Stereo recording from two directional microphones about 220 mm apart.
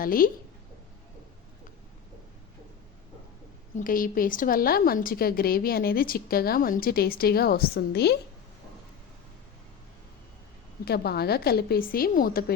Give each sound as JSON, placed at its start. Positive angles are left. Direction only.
{"t": 0.0, "sound": "a woman's voice", "side_deg": 40}
{"t": 3.8, "sound": "a woman's voice", "side_deg": 40}
{"t": 10.8, "sound": "a woman's voice", "side_deg": 45}